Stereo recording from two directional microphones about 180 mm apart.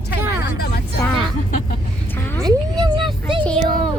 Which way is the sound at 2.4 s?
25° right (ahead or behind).